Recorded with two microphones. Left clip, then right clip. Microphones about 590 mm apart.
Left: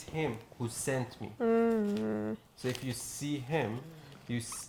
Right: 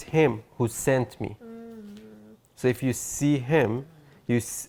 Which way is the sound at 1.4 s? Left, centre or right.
Left.